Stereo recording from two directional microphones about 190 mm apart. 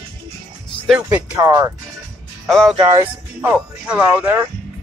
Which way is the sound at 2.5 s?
Centre (ahead or behind).